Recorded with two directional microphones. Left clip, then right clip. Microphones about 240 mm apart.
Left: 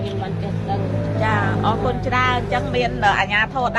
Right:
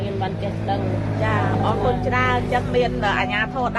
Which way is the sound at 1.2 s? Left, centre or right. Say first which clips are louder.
Left 2 dB; centre.